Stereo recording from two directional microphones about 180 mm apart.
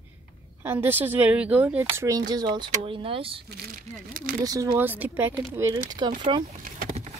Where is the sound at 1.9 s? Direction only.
20° right (ahead or behind).